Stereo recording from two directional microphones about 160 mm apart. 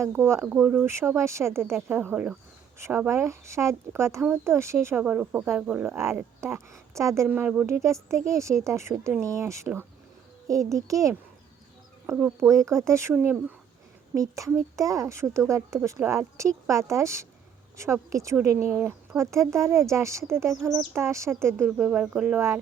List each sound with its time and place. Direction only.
0.0 s a child's voice: 15° right (ahead or behind)